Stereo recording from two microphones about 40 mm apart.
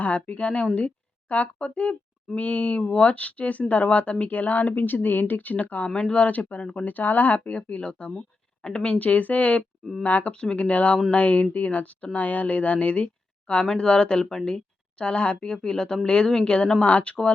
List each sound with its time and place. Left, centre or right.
0.0 s speech: left
4.4 s speech: left
5.9 s speech: left
6.1 s speech: left
6.8 s speech: left
9.0 s speech: left
10.3 s speech: left
10.7 s speech: left
13.7 s speech: centre
14.9 s speech: left
15.6 s speech: centre
16.8 s speech: left